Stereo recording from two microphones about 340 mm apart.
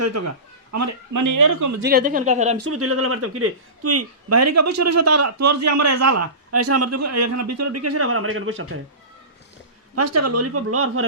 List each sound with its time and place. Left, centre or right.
0.0 s speech: right
1.8 s speech: right
2.6 s speech: right
9.9 s speech: right